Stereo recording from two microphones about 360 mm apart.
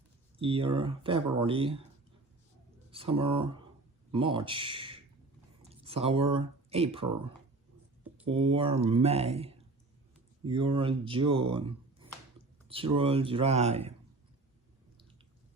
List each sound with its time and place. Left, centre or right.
0.3 s speech: centre
2.9 s speech: centre
8.2 s speech: centre
12.6 s a sound: centre
13.0 s speech: centre